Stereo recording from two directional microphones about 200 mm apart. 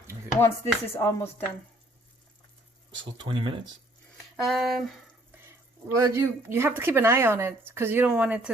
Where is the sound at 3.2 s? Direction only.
25° right (ahead or behind).